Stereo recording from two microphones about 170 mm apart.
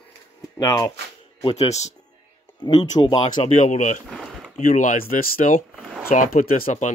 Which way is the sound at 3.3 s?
45° left (ahead or behind).